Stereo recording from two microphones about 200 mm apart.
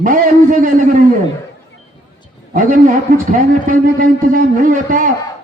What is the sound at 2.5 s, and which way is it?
A man's voice, 40° right (ahead or behind).